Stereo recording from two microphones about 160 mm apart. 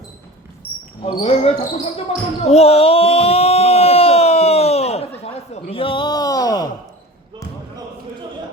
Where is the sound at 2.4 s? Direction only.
40° left (ahead or behind); by 6.7 s 25° left (ahead or behind).